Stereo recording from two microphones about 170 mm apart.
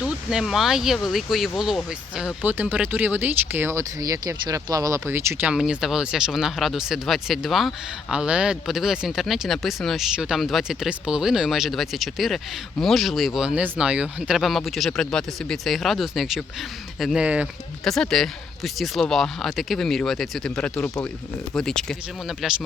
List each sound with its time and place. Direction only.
0.0 s speech: 5° right (ahead or behind)